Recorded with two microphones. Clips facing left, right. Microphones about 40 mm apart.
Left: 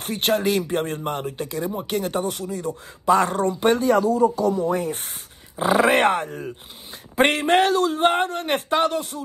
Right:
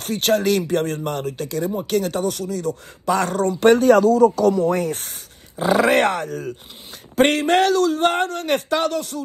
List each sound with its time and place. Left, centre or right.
0.0 s a man's voice: left
3.5 s speech: right
5.6 s a man's voice: centre